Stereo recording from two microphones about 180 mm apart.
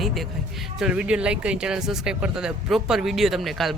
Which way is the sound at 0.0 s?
Centre (ahead or behind).